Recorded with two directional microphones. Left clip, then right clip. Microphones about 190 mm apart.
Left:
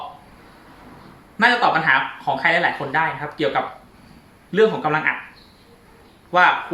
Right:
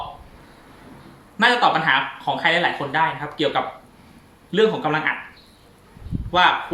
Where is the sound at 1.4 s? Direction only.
Centre (ahead or behind).